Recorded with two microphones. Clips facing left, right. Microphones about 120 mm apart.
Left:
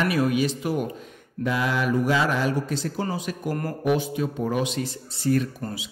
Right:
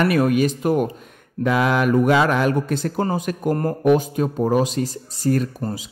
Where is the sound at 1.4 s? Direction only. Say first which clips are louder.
Right 6 dB; 65° right (ahead or behind); by 5.5 s 45° right (ahead or behind).